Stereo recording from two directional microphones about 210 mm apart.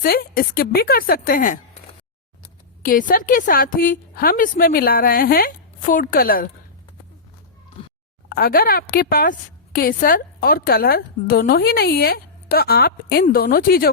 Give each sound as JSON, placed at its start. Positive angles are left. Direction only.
{"t": 0.0, "sound": "a woman's voice", "side_deg": 45}
{"t": 2.8, "sound": "a woman's voice", "side_deg": 40}
{"t": 8.3, "sound": "a woman's voice", "side_deg": 45}